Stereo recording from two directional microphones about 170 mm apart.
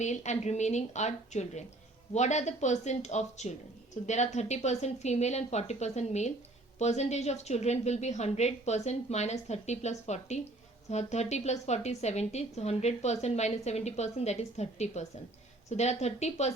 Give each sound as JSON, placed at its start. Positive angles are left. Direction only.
{"t": 0.0, "sound": "a woman's voice", "side_deg": 45}